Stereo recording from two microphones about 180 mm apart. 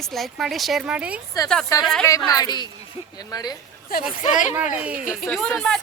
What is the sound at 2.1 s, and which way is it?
Speech, 20° left (ahead or behind).